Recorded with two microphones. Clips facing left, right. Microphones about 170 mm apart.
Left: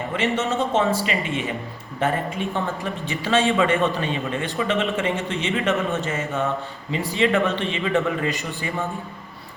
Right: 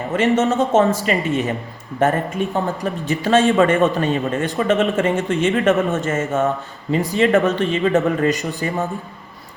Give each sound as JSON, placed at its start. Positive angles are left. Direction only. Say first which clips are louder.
{"t": 0.1, "sound": "a man's voice", "louder": "right 8 dB", "side_deg": -40}